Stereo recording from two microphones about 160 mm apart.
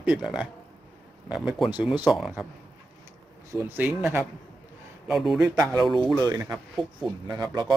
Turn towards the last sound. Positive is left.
turn(degrees=-25)  # may be behind; listen again after turning